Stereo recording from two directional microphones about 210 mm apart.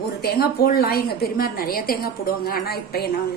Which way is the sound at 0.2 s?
45° left (ahead or behind).